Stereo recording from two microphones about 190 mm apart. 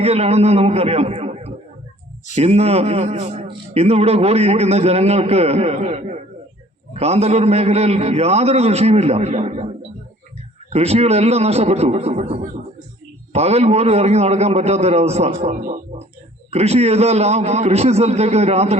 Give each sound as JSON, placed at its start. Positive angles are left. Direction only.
{"t": 0.0, "sound": "a man's voice", "side_deg": -35}
{"t": 10.7, "sound": "a man's voice", "side_deg": -35}